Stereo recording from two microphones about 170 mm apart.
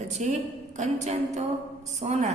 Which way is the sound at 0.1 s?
40° right (ahead or behind).